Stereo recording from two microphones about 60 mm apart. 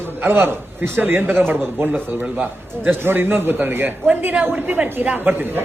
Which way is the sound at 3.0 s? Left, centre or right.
Right.